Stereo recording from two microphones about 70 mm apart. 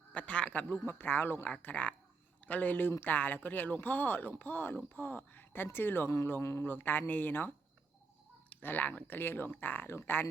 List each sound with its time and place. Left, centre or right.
0.1 s speech: centre
0.9 s speech: left
6.7 s speech: left